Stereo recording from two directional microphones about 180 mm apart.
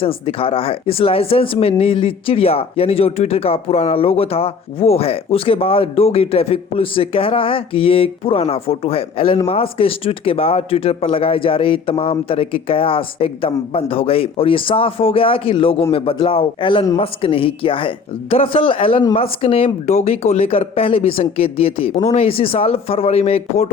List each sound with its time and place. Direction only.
0.0 s speech: 30° left (ahead or behind)